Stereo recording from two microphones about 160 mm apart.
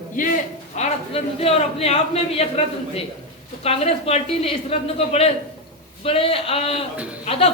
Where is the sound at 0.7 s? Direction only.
40° left (ahead or behind).